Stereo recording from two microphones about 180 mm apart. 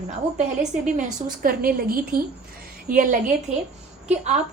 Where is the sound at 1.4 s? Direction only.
55° right (ahead or behind).